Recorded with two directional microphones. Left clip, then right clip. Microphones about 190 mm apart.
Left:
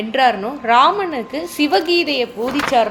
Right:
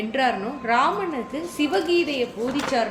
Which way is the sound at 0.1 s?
35° left (ahead or behind).